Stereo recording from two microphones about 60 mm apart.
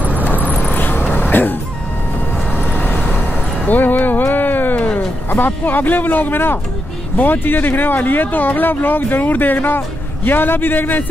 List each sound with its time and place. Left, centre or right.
0.2 s vehicle: left
0.7 s a sound: left
2.6 s vehicle: left
7.2 s speech: left